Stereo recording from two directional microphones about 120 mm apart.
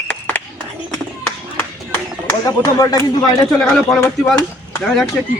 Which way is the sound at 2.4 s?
30° left (ahead or behind).